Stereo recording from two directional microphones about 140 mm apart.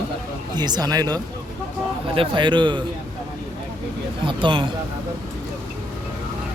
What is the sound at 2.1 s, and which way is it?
Speech, 40° right (ahead or behind).